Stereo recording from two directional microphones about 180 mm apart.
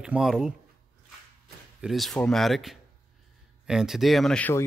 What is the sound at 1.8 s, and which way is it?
A man's voice, centre (ahead or behind).